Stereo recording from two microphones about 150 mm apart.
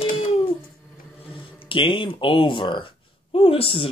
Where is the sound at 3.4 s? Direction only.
40° left (ahead or behind).